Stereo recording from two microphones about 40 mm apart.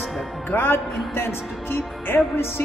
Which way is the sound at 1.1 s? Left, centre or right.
Left.